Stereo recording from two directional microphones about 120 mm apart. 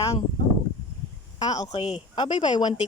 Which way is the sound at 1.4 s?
30° left (ahead or behind).